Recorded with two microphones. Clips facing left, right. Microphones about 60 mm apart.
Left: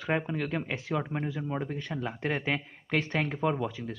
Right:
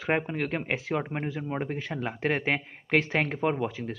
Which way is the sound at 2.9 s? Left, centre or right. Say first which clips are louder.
Right 4 dB; right.